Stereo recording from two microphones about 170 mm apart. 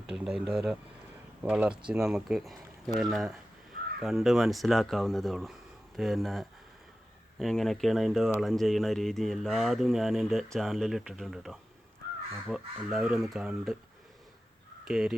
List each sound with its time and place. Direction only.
0.1 s speech: 5° right (ahead or behind)
14.8 s speech: 5° right (ahead or behind)